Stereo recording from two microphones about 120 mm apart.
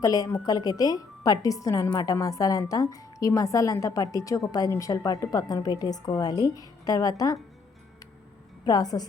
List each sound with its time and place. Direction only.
0.0 s a woman's voice: 30° left (ahead or behind)
8.6 s a woman's voice: 35° left (ahead or behind)